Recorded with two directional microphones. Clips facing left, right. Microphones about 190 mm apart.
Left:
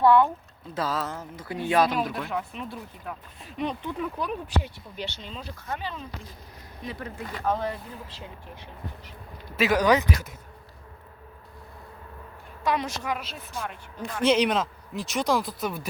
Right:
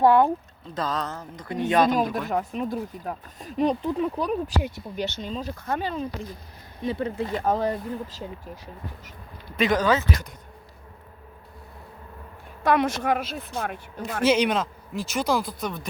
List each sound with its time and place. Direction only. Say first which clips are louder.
0.0 s speech: right 1 dB; 45° right (ahead or behind)
0.7 s speech: even; 5° left (ahead or behind)
2.1 s speech: right 5 dB; 45° right (ahead or behind)
6.8 s speech: right 9 dB; 25° right (ahead or behind)
7.4 s speech: right 2 dB; 40° right (ahead or behind)
9.6 s speech: even; 10° left (ahead or behind)
12.6 s a woman's voice: right 6 dB; 55° right (ahead or behind)
14.3 s speech: right 1 dB; centre (ahead or behind)